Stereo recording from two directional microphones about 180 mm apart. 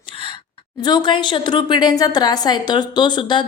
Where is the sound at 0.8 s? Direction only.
25° left (ahead or behind).